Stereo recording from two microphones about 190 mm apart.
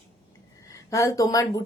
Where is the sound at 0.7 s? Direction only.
15° left (ahead or behind).